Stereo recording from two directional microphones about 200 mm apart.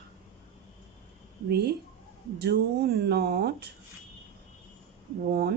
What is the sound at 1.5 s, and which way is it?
Speech, 55° right (ahead or behind).